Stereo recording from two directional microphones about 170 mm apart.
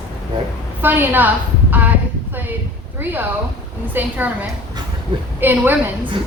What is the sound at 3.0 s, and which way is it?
A woman's voice, 10° right (ahead or behind).